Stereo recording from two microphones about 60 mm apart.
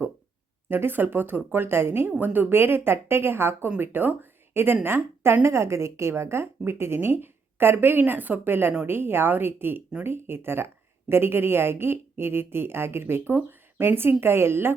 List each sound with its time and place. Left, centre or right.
0.7 s a woman's voice: right